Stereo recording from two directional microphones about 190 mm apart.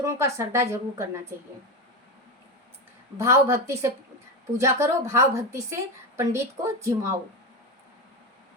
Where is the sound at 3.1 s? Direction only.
15° right (ahead or behind).